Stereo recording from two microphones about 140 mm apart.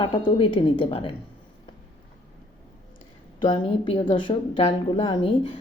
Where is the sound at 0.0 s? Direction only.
35° left (ahead or behind).